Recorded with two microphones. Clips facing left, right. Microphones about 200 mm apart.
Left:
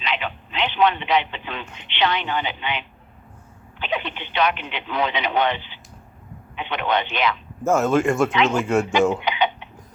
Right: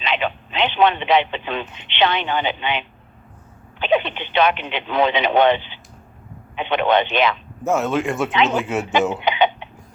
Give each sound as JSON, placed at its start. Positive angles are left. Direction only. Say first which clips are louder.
{"t": 0.0, "sound": "speech", "louder": "right 5 dB", "side_deg": -25}
{"t": 7.6, "sound": "speech", "louder": "left 2 dB", "side_deg": 0}
{"t": 8.3, "sound": "speech", "louder": "right 1 dB", "side_deg": -20}
{"t": 8.5, "sound": "speech", "louder": "left 2 dB", "side_deg": 0}
{"t": 8.9, "sound": "speech", "louder": "right 2 dB", "side_deg": -20}
{"t": 9.2, "sound": "a sound", "louder": "right 4 dB", "side_deg": -25}